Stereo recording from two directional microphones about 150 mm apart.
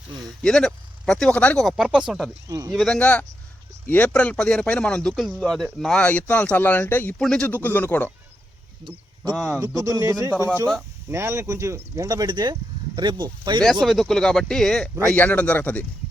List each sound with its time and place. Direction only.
0.4 s speech: 5° left (ahead or behind)
2.5 s speech: 20° right (ahead or behind)
2.7 s speech: 5° left (ahead or behind)
9.3 s speech: centre (ahead or behind)
9.6 s speech: 20° right (ahead or behind)
13.8 s speech: centre (ahead or behind)